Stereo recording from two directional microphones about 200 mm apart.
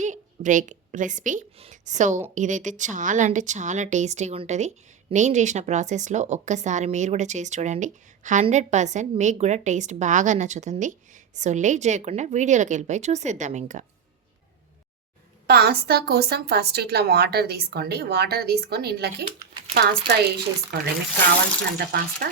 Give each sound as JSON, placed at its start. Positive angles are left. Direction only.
{"t": 0.0, "sound": "a woman's voice", "side_deg": -40}
{"t": 15.4, "sound": "a woman's voice", "side_deg": -50}
{"t": 21.8, "sound": "a woman's voice", "side_deg": -50}